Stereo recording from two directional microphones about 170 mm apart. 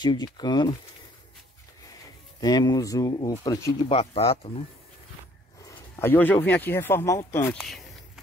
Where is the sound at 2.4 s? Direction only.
25° left (ahead or behind).